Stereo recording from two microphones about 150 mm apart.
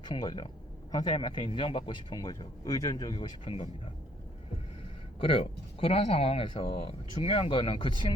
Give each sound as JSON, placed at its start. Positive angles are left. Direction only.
{"t": 0.0, "sound": "a man's voice", "side_deg": 25}
{"t": 1.1, "sound": "speech", "side_deg": 35}
{"t": 5.2, "sound": "speech", "side_deg": 40}